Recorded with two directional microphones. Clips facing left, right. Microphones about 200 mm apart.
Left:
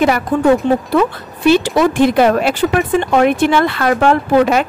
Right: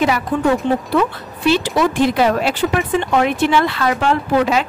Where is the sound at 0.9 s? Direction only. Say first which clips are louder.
Left 3 dB; 50° left (ahead or behind).